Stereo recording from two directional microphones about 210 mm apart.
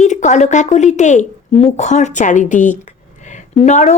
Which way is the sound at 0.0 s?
35° left (ahead or behind).